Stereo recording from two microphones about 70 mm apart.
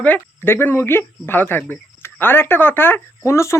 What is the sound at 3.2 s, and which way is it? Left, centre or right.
Speech, left.